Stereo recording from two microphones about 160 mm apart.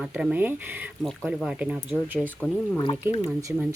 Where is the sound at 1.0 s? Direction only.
Centre (ahead or behind).